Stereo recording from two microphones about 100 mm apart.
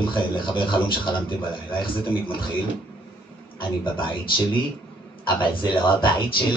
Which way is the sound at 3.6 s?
55° left (ahead or behind).